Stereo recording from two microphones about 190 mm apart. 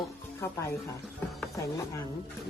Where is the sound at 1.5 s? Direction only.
15° left (ahead or behind).